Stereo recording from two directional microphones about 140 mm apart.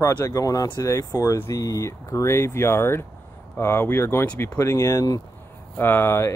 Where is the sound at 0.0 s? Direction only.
20° left (ahead or behind).